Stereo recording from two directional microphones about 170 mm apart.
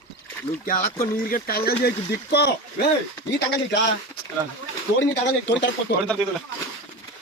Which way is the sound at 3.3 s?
85° left.